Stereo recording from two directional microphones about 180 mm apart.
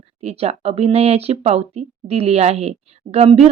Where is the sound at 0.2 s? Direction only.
35° right (ahead or behind).